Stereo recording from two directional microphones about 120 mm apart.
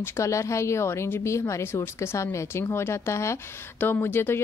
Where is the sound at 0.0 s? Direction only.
25° left (ahead or behind).